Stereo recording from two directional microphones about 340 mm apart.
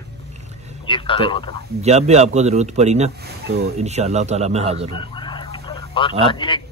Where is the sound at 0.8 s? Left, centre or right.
Centre.